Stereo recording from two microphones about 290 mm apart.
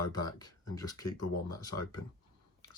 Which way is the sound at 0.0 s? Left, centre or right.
Centre.